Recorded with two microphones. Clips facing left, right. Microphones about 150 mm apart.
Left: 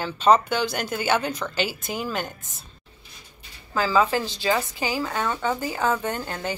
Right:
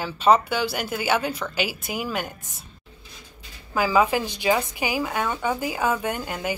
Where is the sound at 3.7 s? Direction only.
15° right (ahead or behind).